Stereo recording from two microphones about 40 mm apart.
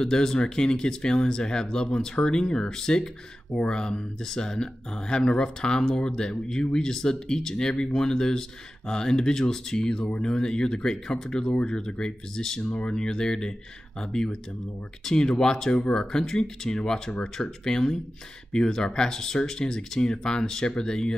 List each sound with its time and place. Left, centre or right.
0.0 s speech: centre